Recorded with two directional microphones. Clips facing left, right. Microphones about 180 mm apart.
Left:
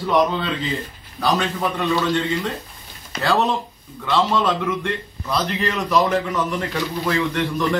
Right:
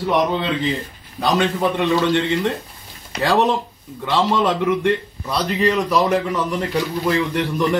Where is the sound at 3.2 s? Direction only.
15° right (ahead or behind).